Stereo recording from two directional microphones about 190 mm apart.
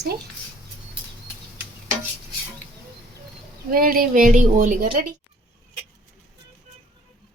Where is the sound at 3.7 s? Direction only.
50° right (ahead or behind).